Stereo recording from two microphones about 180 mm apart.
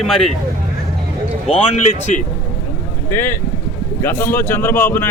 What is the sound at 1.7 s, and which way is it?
Speech, 40° left (ahead or behind).